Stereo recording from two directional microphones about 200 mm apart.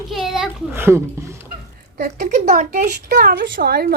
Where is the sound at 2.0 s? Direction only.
45° right (ahead or behind).